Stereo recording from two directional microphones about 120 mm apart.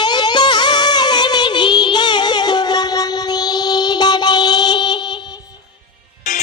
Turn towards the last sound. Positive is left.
turn(degrees=90)